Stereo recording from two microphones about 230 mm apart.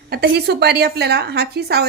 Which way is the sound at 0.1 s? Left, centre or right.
Right.